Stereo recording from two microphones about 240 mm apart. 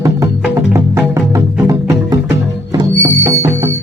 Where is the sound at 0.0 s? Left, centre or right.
Centre.